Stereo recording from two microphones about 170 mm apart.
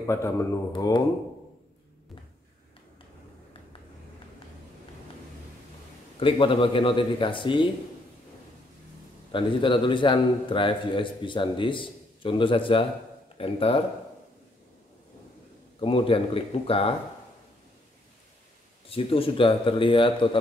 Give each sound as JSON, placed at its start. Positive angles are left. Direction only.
{"t": 0.0, "sound": "speech", "side_deg": 15}
{"t": 6.1, "sound": "a man's voice", "side_deg": 30}
{"t": 9.3, "sound": "a man's voice", "side_deg": 30}
{"t": 15.8, "sound": "speech", "side_deg": 30}
{"t": 18.9, "sound": "speech", "side_deg": 35}